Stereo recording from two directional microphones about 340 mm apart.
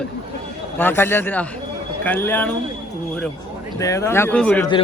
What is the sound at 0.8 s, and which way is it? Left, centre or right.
Speech, centre.